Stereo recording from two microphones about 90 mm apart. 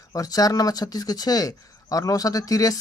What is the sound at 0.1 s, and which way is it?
Speech, 40° left (ahead or behind).